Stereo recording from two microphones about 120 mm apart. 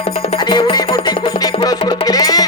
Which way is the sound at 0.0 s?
55° left (ahead or behind).